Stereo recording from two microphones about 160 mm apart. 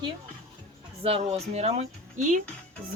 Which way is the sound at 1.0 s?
40° right (ahead or behind).